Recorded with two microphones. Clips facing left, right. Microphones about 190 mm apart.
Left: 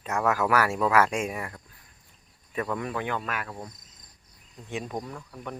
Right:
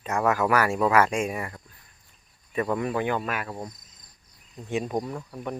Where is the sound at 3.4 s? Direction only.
25° right (ahead or behind).